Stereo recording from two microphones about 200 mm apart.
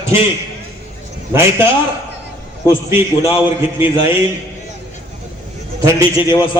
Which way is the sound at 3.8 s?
25° left (ahead or behind).